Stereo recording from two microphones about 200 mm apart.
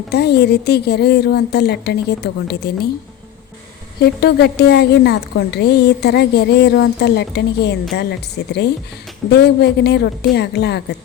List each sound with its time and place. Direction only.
0.1 s a woman's voice: 55° left (ahead or behind)
4.0 s a woman's voice: 55° left (ahead or behind)